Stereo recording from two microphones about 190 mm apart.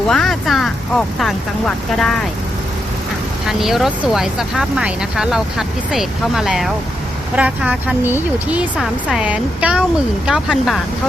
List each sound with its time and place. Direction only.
0.1 s speech: centre (ahead or behind)
3.6 s speech: centre (ahead or behind)